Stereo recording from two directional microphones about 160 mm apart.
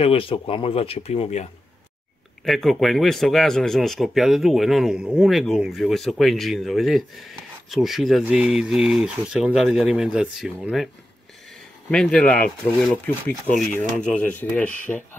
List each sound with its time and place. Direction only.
0.0 s speech: 35° left (ahead or behind)
2.4 s speech: centre (ahead or behind)
11.9 s speech: 5° left (ahead or behind)